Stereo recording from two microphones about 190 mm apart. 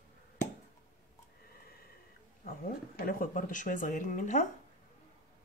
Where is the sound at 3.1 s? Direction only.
45° left (ahead or behind).